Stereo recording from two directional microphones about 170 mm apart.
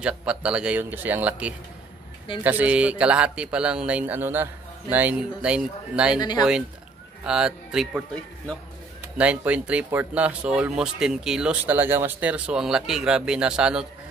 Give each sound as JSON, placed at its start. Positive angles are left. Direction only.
{"t": 0.0, "sound": "a man's voice", "side_deg": -5}
{"t": 6.1, "sound": "speech", "side_deg": 25}
{"t": 7.2, "sound": "speech", "side_deg": -5}
{"t": 9.2, "sound": "a man's voice", "side_deg": -10}